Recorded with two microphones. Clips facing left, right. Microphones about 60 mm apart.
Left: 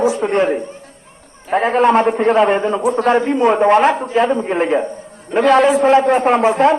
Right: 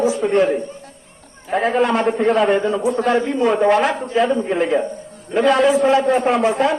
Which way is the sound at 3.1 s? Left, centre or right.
Left.